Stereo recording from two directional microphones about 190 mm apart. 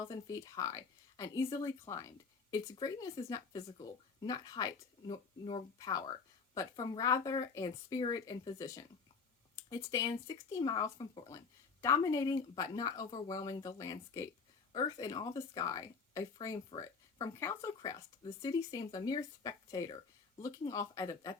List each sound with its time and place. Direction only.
0.1 s speech: 20° left (ahead or behind)